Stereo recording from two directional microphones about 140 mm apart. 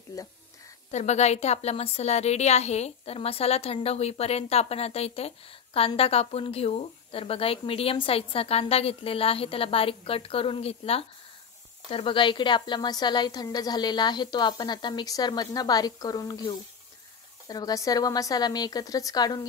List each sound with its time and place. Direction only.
0.1 s speech: 25° left (ahead or behind)
0.9 s a woman's voice: 50° left (ahead or behind); by 19.4 s 30° left (ahead or behind)